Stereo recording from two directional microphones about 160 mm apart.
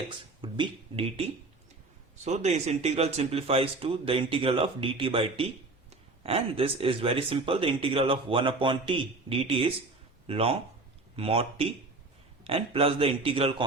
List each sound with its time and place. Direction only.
0.4 s speech: 30° right (ahead or behind)
2.2 s speech: 45° right (ahead or behind)